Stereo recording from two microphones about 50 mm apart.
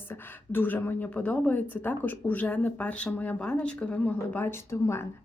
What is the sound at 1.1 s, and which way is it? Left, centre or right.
Speech, left.